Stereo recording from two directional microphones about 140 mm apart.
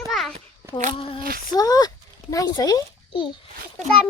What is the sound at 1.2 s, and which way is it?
Speech, 90° right.